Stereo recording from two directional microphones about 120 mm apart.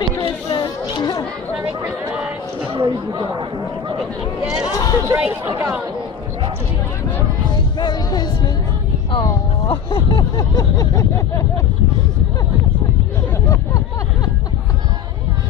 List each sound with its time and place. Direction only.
0.5 s children playing: 40° left (ahead or behind)
1.6 s chatter: 25° right (ahead or behind)
2.7 s a man's voice: 40° right (ahead or behind)
4.0 s speech: 5° right (ahead or behind)
7.8 s speech: 35° left (ahead or behind)
9.7 s a sound: 45° left (ahead or behind); by 11.6 s 25° left (ahead or behind)
13.5 s a sound: 30° left (ahead or behind)